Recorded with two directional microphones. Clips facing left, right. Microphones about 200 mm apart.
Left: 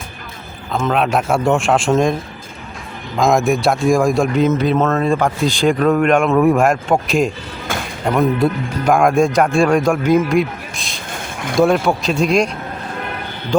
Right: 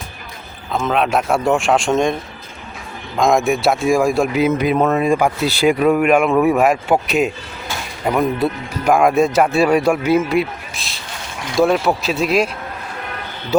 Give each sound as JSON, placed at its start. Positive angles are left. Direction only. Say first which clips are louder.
{"t": 0.7, "sound": "speech", "louder": "left 1 dB", "side_deg": 0}
{"t": 3.2, "sound": "speech", "louder": "left 1 dB", "side_deg": 0}
{"t": 7.7, "sound": "a sound", "louder": "left 4 dB", "side_deg": 50}
{"t": 8.0, "sound": "speech", "louder": "left 2 dB", "side_deg": -5}
{"t": 13.5, "sound": "speech", "louder": "right 1 dB", "side_deg": -5}